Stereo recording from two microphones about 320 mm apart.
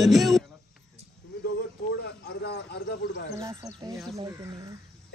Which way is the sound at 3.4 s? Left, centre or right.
Centre.